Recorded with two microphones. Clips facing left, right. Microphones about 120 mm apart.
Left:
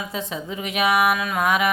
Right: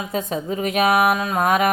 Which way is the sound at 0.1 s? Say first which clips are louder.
Right 5 dB; 45° right (ahead or behind).